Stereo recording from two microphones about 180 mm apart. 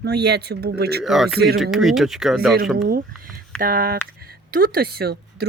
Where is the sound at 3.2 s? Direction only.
55° right (ahead or behind).